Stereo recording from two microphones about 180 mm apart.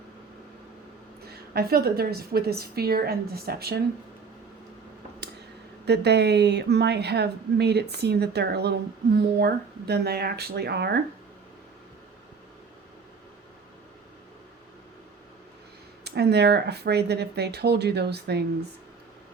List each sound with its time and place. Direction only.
1.3 s a woman's voice: 60° right (ahead or behind)
5.8 s a woman's voice: 65° right (ahead or behind)
16.0 s a woman's voice: 65° right (ahead or behind)